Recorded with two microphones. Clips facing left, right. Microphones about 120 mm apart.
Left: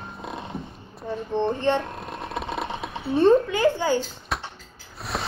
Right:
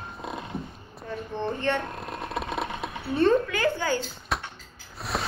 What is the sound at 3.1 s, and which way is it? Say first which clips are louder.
Speech: left 4 dB; 20° left (ahead or behind).